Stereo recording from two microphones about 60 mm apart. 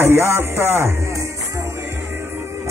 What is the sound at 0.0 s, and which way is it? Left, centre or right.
Speech, right.